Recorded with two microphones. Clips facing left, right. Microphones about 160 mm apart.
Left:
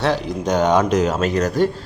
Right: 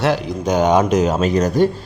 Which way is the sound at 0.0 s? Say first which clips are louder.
Right 2 dB; 5° right (ahead or behind).